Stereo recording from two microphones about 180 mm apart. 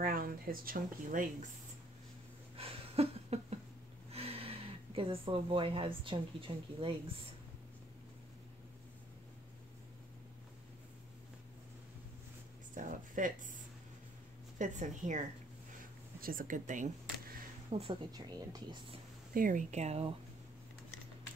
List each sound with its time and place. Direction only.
0.0 s speech: 55° right (ahead or behind)
2.5 s a sound: 30° right (ahead or behind)
4.1 s speech: 35° right (ahead or behind)
12.7 s a sound: 45° right (ahead or behind)
14.6 s speech: 45° right (ahead or behind)
17.6 s a woman's voice: 30° right (ahead or behind)
19.3 s speech: 50° right (ahead or behind)